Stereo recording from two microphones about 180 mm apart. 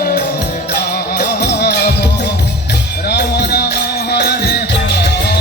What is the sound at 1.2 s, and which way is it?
Music, 65° left (ahead or behind).